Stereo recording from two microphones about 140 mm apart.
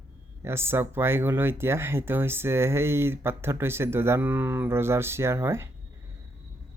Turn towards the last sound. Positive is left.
turn(degrees=-20)  # may be behind; listen again after turning